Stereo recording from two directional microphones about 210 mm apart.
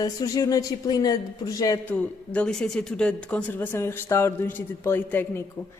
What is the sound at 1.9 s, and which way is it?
Speech, 5° left (ahead or behind).